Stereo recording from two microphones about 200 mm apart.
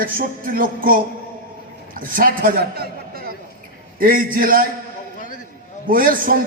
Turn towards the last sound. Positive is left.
turn(degrees=-45)  # may be behind; listen again after turning